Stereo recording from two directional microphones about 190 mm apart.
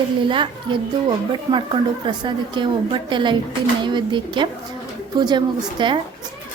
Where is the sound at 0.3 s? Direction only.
25° right (ahead or behind).